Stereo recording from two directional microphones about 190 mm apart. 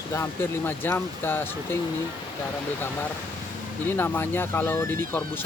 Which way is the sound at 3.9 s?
10° left (ahead or behind).